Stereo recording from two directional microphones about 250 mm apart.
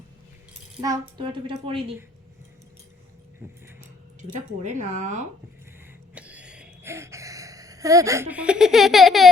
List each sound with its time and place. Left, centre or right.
0.8 s a woman's voice: centre
4.2 s a woman's voice: right
6.1 s a sound: centre